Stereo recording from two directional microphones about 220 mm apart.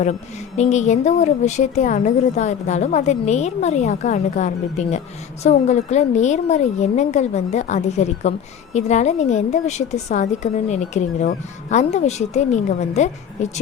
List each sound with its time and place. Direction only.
0.0 s a woman's voice: 30° left (ahead or behind)